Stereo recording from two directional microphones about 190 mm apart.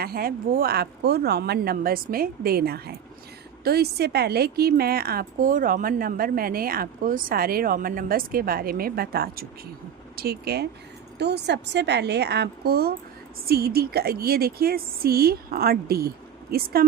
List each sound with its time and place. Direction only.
0.0 s a woman's voice: 55° right (ahead or behind)